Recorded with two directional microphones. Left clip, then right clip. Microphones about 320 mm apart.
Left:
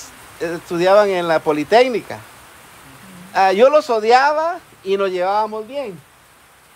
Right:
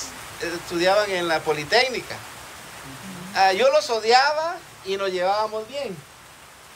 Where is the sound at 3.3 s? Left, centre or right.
Centre.